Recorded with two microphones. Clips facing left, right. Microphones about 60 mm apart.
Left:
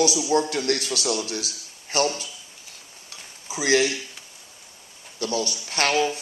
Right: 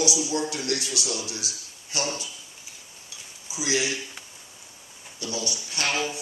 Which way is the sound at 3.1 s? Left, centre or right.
Left.